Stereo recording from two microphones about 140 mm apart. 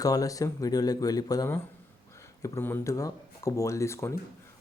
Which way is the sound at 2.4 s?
15° left (ahead or behind).